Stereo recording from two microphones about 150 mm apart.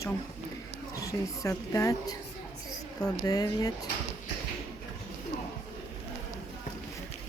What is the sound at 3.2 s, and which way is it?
Speech, 25° left (ahead or behind).